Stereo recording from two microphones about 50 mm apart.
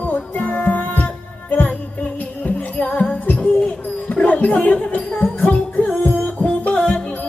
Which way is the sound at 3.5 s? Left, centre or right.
Centre.